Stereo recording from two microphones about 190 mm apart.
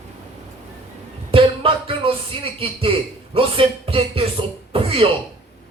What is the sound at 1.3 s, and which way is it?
A man's voice, 30° right (ahead or behind).